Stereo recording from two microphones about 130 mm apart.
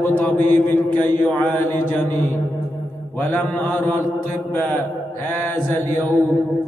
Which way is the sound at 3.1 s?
15° left (ahead or behind).